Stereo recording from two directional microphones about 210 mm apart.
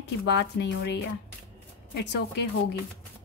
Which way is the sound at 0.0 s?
55° left (ahead or behind).